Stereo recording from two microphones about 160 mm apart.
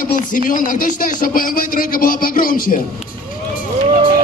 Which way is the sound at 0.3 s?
60° left (ahead or behind).